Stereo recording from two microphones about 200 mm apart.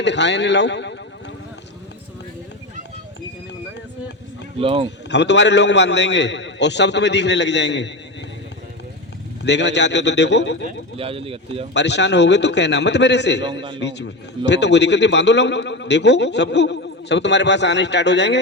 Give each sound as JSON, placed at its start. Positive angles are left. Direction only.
{"t": 0.0, "sound": "a man's voice", "side_deg": 60}
{"t": 4.6, "sound": "speech", "side_deg": -25}
{"t": 5.0, "sound": "a man's voice", "side_deg": 60}
{"t": 9.4, "sound": "a man's voice", "side_deg": 60}
{"t": 10.9, "sound": "speech", "side_deg": -30}
{"t": 11.7, "sound": "a man's voice", "side_deg": 60}
{"t": 13.5, "sound": "speech", "side_deg": -25}
{"t": 13.7, "sound": "a man's voice", "side_deg": 60}